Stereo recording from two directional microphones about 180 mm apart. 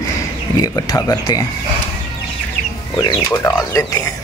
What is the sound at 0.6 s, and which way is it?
Speech, 20° left (ahead or behind).